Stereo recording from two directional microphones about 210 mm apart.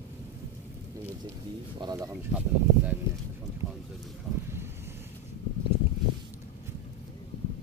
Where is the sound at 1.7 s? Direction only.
20° right (ahead or behind).